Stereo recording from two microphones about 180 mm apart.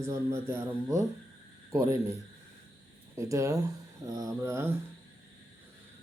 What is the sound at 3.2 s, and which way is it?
Speech, 15° right (ahead or behind).